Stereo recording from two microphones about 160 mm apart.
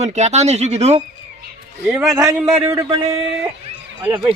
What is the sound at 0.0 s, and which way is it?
Speech, 45° right (ahead or behind).